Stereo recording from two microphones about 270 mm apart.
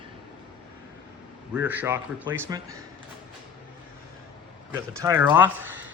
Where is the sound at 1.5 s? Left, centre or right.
Centre.